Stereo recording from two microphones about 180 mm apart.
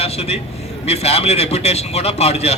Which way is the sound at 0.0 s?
35° left (ahead or behind).